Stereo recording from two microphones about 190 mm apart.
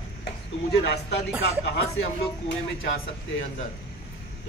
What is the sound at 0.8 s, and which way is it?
Speech, 60° left (ahead or behind).